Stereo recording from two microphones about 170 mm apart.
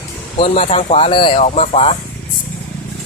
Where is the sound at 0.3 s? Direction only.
40° left (ahead or behind).